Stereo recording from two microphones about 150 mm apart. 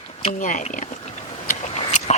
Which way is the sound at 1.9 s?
50° left (ahead or behind).